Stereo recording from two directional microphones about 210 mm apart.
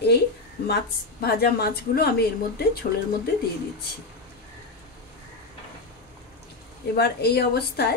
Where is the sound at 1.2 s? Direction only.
50° left (ahead or behind).